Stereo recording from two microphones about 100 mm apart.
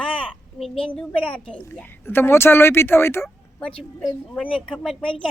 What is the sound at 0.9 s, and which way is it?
Speech, 10° left (ahead or behind).